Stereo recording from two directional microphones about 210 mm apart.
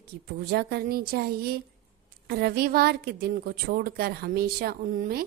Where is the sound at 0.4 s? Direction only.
50° right (ahead or behind).